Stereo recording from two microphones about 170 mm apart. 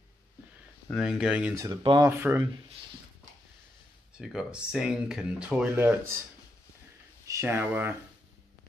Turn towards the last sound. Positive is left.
turn(degrees=-15)  # may be behind; listen again after turning